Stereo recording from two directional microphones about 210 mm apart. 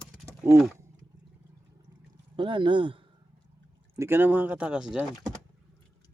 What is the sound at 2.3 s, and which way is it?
Speech, 25° right (ahead or behind).